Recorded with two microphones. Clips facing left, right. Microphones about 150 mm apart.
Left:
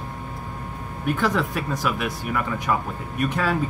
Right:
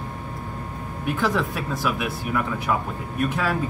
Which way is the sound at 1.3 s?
5° right (ahead or behind).